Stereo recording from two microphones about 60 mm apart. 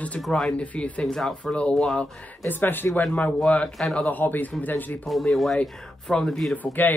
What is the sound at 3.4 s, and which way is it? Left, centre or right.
Speech, centre.